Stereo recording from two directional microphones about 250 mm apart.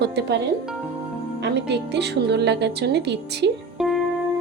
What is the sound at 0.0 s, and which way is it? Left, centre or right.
Speech, right.